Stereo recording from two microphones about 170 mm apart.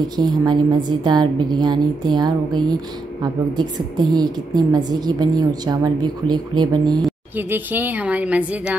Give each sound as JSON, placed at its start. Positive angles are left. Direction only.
{"t": 0.2, "sound": "a woman's voice", "side_deg": -25}
{"t": 7.3, "sound": "a woman's voice", "side_deg": -10}